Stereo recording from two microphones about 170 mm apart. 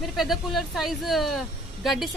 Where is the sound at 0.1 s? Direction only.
Centre (ahead or behind).